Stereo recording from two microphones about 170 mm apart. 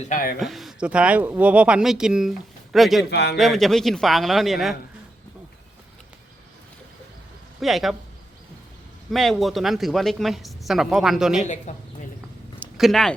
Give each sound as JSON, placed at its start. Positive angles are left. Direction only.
{"t": 0.1, "sound": "a man's voice", "side_deg": 55}
{"t": 0.3, "sound": "speech", "side_deg": 0}
{"t": 3.1, "sound": "a man's voice", "side_deg": 75}
{"t": 3.3, "sound": "speech", "side_deg": 0}
{"t": 7.6, "sound": "speech", "side_deg": 0}
{"t": 9.1, "sound": "speech", "side_deg": 0}
{"t": 11.4, "sound": "speech", "side_deg": 45}
{"t": 12.7, "sound": "speech", "side_deg": 0}